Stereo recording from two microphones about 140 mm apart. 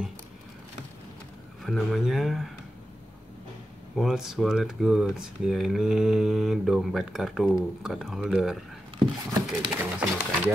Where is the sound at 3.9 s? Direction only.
5° right (ahead or behind).